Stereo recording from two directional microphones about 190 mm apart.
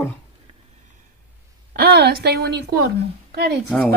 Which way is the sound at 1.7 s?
55° right (ahead or behind).